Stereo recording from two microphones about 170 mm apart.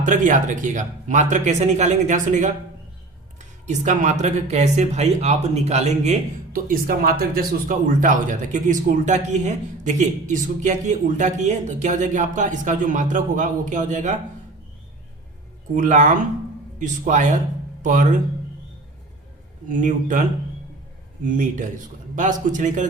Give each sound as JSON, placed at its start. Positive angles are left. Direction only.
{"t": 0.0, "sound": "speech", "side_deg": -50}
{"t": 3.7, "sound": "speech", "side_deg": -45}
{"t": 6.5, "sound": "speech", "side_deg": -55}
{"t": 15.7, "sound": "speech", "side_deg": -45}
{"t": 19.6, "sound": "speech", "side_deg": -50}
{"t": 21.2, "sound": "speech", "side_deg": -50}